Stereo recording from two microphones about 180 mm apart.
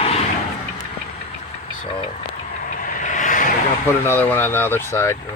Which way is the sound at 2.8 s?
45° left (ahead or behind).